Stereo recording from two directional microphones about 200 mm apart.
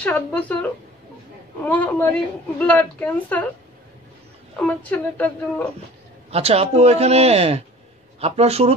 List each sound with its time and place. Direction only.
0.0 s a woman's voice: 5° left (ahead or behind)
4.6 s a woman's voice: 5° left (ahead or behind)
6.3 s speech: 30° right (ahead or behind)